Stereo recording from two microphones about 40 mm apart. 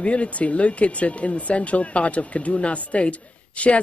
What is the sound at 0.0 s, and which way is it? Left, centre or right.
Speech, left.